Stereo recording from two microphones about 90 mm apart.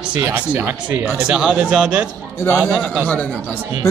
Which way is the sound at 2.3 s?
30° left (ahead or behind).